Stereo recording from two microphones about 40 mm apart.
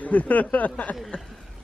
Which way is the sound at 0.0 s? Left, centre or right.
Left.